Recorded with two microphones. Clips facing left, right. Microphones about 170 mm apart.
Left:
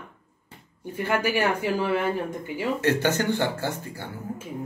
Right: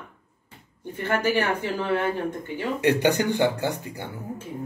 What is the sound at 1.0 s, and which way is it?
Speech, 10° left (ahead or behind).